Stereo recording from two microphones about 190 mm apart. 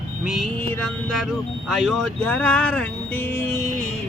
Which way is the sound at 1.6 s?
Centre (ahead or behind).